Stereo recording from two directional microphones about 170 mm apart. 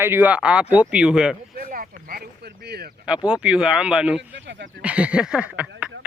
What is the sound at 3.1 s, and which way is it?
Speech, 5° right (ahead or behind).